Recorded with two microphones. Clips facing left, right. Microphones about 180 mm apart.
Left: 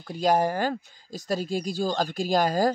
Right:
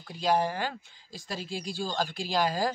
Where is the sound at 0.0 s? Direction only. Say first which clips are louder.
Left 4 dB; 45° left (ahead or behind).